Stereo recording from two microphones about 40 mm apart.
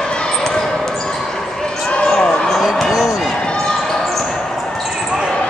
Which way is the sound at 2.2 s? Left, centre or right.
Left.